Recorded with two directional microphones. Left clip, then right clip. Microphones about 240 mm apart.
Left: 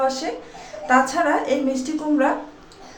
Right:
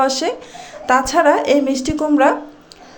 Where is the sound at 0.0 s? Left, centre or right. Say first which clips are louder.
Right 5 dB; right.